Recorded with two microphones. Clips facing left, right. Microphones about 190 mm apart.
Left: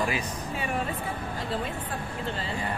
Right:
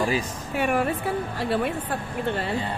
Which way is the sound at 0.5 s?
70° right (ahead or behind).